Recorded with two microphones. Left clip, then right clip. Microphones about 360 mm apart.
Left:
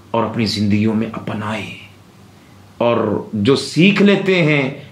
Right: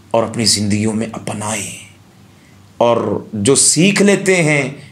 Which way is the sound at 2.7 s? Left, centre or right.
Centre.